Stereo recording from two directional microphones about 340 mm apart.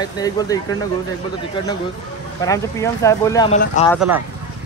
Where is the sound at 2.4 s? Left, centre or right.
Centre.